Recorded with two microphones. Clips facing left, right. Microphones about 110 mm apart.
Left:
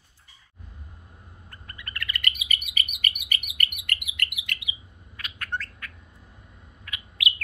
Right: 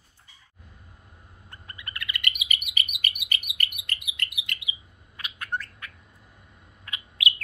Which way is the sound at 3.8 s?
25° right (ahead or behind).